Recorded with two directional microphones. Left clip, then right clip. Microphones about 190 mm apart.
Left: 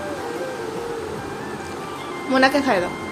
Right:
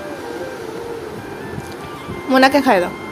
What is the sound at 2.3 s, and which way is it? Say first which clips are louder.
Speech: right 5 dB; 30° right (ahead or behind).